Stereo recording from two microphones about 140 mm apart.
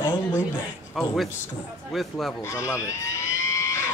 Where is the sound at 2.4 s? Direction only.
20° left (ahead or behind).